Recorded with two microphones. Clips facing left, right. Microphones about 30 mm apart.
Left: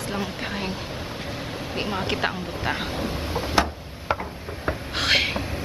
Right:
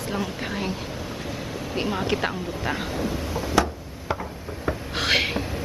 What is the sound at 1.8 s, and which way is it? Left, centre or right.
Speech, centre.